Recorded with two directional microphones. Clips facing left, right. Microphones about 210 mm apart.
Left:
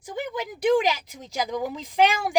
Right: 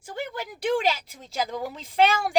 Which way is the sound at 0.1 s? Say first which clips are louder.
Left 3 dB; 15° left (ahead or behind).